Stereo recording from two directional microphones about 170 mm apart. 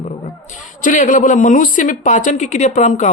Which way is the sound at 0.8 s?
50° left (ahead or behind).